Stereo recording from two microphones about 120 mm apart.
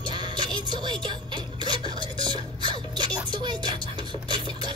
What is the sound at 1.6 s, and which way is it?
Dishes, 40° right (ahead or behind).